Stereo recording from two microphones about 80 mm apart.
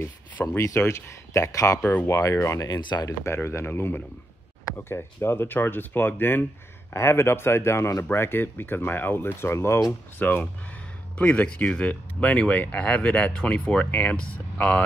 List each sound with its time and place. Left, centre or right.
0.6 s speech: left
1.8 s speech: centre
2.0 s speech: left
2.7 s speech: left
3.4 s speech: left
10.1 s speech: left